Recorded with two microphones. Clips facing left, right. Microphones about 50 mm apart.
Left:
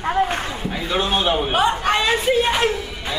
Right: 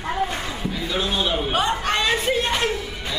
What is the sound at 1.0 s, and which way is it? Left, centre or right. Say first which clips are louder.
Speech: left 5 dB; left.